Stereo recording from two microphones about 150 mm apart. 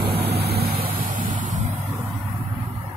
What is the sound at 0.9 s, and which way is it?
Vehicle, 60° right (ahead or behind).